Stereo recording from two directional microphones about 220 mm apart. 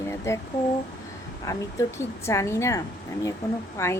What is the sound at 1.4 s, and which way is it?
A woman's voice, 15° left (ahead or behind).